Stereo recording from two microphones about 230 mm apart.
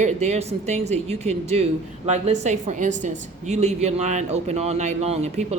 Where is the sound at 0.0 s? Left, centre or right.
Right.